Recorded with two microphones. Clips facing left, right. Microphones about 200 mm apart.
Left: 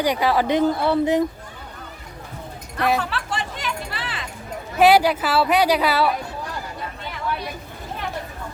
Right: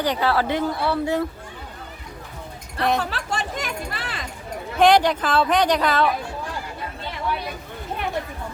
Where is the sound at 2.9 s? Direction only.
40° right (ahead or behind).